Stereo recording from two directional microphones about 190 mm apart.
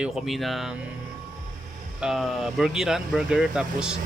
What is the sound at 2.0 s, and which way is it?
Speech, centre (ahead or behind).